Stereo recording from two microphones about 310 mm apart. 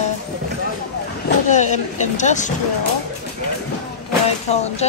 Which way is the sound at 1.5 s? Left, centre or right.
Left.